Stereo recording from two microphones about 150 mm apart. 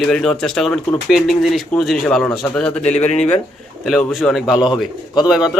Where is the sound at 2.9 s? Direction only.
50° left (ahead or behind).